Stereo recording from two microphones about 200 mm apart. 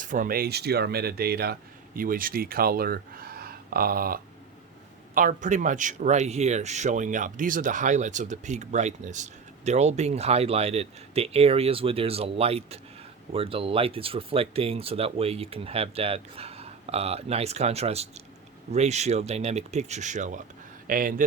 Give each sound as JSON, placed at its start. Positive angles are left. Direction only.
{"t": 0.0, "sound": "speech", "side_deg": -40}